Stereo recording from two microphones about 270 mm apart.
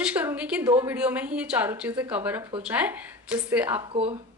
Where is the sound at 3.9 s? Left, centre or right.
Right.